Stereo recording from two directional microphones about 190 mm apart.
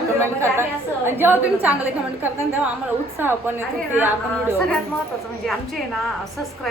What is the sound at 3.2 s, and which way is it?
A woman's voice, 10° right (ahead or behind).